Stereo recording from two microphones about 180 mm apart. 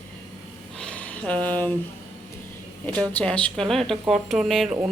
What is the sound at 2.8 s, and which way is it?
A woman's voice, 10° left (ahead or behind).